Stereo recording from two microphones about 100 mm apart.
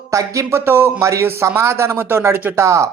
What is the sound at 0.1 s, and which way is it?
A man's voice, 30° right (ahead or behind).